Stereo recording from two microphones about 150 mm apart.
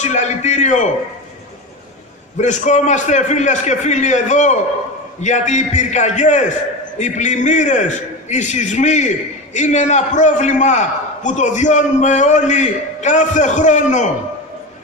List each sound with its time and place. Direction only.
0.0 s a man's voice: 50° left (ahead or behind)
2.3 s a man's voice: 55° left (ahead or behind)